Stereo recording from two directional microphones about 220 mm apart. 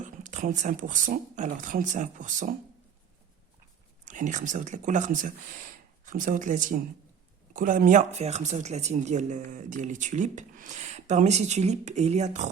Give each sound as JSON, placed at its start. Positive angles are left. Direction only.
{"t": 0.0, "sound": "speech", "side_deg": -35}
{"t": 4.0, "sound": "speech", "side_deg": -35}